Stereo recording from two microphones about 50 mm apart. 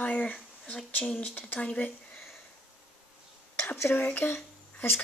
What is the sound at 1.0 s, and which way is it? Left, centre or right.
Speech, centre.